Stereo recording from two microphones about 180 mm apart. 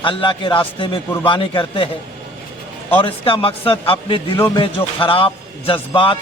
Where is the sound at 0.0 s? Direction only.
30° left (ahead or behind).